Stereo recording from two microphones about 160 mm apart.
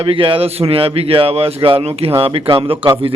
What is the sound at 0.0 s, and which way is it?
A man's voice, 35° right (ahead or behind).